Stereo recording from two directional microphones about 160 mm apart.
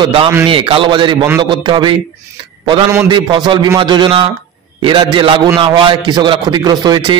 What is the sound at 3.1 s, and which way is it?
A man's voice, 30° right (ahead or behind).